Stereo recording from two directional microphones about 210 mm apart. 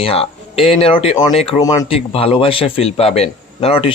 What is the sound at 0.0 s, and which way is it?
A man's voice, 25° left (ahead or behind).